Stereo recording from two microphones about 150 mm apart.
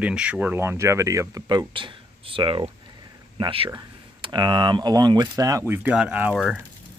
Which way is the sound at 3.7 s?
25° right (ahead or behind).